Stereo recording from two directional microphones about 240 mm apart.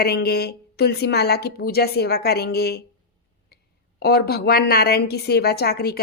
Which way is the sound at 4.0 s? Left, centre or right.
Left.